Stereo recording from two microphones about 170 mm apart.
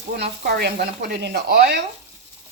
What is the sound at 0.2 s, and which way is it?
Speech, 70° right (ahead or behind).